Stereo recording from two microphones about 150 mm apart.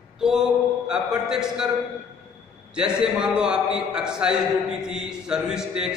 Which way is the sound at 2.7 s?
5° right (ahead or behind).